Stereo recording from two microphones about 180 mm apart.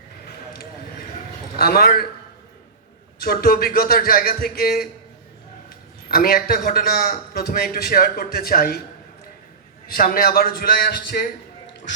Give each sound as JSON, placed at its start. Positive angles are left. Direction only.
{"t": 1.5, "sound": "a man's voice", "side_deg": 55}
{"t": 3.2, "sound": "a man's voice", "side_deg": 55}
{"t": 6.1, "sound": "a man's voice", "side_deg": 55}
{"t": 9.8, "sound": "a man's voice", "side_deg": 55}